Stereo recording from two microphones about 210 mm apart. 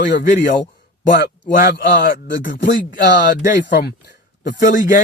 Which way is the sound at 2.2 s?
60° left (ahead or behind).